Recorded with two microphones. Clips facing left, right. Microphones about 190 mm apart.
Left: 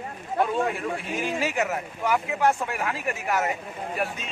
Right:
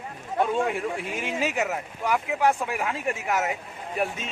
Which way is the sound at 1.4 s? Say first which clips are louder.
Right 3 dB; 15° right (ahead or behind).